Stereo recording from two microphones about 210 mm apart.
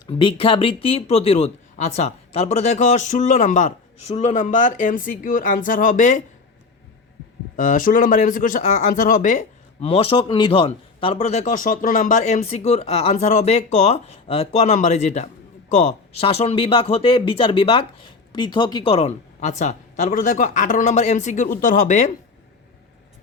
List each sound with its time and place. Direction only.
0.1 s speech: 25° left (ahead or behind)
7.5 s speech: 40° left (ahead or behind)